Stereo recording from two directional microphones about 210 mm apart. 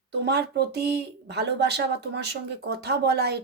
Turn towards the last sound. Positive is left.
turn(degrees=-50)  # may be behind; listen again after turning